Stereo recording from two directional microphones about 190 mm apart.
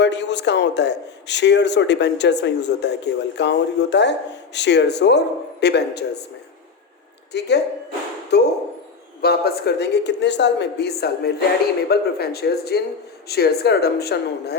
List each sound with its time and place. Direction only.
0.0 s a man's voice: 65° left (ahead or behind)
7.3 s a man's voice: 60° left (ahead or behind)